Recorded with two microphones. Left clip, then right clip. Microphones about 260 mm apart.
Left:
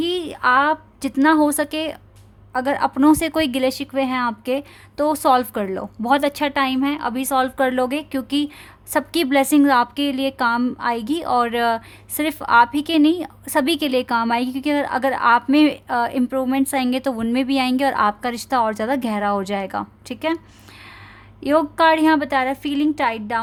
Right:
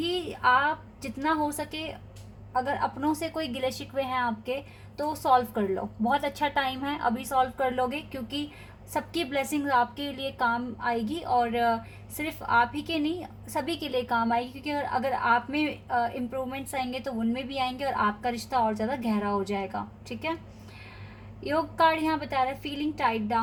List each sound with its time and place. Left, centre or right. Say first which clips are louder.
0.0 s a woman's voice: left 6 dB; left
21.4 s a woman's voice: left 8 dB; left